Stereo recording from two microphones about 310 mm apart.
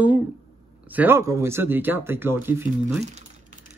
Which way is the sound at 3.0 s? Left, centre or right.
Right.